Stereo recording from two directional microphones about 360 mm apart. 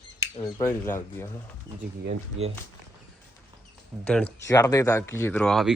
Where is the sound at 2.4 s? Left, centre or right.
Right.